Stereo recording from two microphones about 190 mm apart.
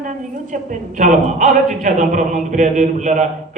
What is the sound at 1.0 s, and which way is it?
A man's voice, 40° right (ahead or behind).